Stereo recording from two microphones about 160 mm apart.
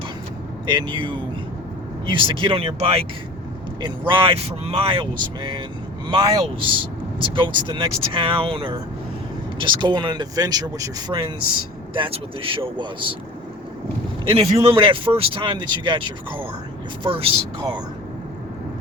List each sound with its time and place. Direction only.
0.7 s speech: 30° right (ahead or behind)
14.3 s speech: 40° right (ahead or behind)